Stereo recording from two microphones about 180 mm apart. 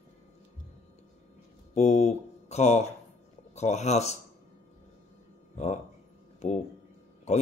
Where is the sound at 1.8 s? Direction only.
40° left (ahead or behind).